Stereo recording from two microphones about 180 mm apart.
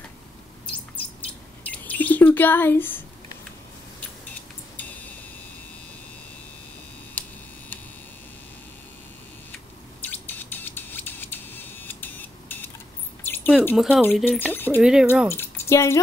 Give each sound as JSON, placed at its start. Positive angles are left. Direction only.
{"t": 1.7, "sound": "speech", "side_deg": 10}
{"t": 7.2, "sound": "a sound", "side_deg": 10}
{"t": 10.0, "sound": "a sound", "side_deg": 10}
{"t": 13.7, "sound": "speech", "side_deg": 0}
{"t": 14.5, "sound": "speech", "side_deg": 10}
{"t": 14.8, "sound": "speech", "side_deg": -5}
{"t": 15.2, "sound": "speech", "side_deg": 15}